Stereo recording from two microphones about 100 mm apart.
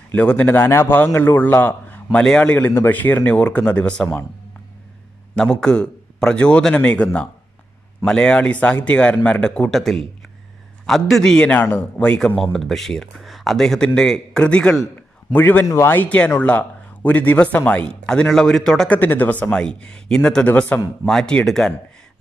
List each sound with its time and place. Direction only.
0.1 s a man's voice: 15° left (ahead or behind)
5.3 s a man's voice: 5° left (ahead or behind)
12.4 s speech: centre (ahead or behind)
15.3 s a man's voice: 20° left (ahead or behind); by 18.9 s 5° left (ahead or behind)
18.9 s a man's voice: 20° left (ahead or behind)